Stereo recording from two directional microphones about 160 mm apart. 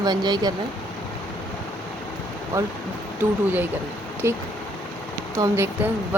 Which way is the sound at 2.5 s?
20° right (ahead or behind).